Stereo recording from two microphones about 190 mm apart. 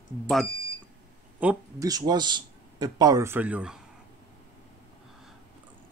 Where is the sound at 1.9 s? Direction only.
20° right (ahead or behind).